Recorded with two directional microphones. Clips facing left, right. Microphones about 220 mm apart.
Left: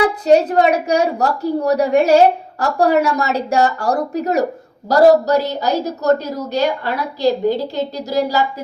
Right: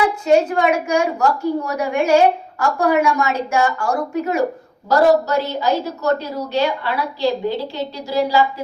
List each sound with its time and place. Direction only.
0.3 s a woman's voice: 40° left (ahead or behind)